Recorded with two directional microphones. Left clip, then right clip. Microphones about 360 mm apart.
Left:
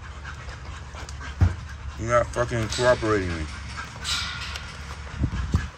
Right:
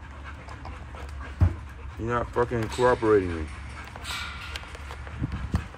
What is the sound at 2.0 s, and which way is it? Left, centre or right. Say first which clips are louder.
Speech: left 4 dB; centre.